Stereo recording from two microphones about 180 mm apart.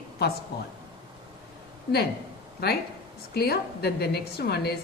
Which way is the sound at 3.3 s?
60° left (ahead or behind).